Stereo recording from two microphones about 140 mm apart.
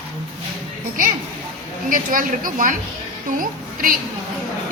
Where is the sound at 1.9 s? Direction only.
80° right.